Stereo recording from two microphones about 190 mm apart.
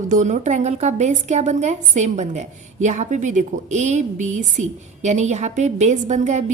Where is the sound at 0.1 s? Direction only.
40° right (ahead or behind).